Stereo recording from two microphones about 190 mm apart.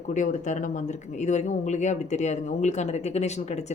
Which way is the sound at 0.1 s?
40° left (ahead or behind).